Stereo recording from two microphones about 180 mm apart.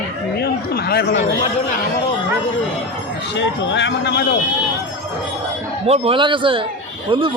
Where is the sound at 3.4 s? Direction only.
75° left (ahead or behind).